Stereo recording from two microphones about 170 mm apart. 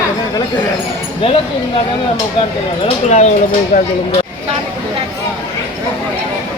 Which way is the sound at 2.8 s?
40° left (ahead or behind).